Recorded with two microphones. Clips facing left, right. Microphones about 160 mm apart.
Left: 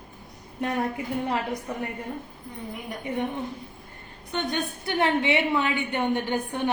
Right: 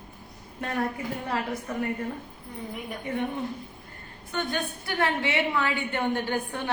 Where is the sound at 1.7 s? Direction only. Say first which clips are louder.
Right 1 dB; 20° left (ahead or behind).